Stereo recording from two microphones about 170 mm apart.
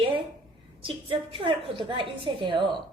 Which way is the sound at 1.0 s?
30° right (ahead or behind).